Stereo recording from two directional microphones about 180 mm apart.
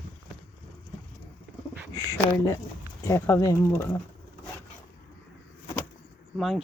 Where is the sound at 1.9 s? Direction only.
15° left (ahead or behind).